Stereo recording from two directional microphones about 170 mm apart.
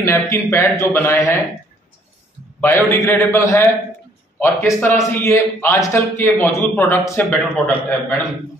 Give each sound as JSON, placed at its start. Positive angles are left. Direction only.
{"t": 0.0, "sound": "a man's voice", "side_deg": 15}
{"t": 2.6, "sound": "a man's voice", "side_deg": 15}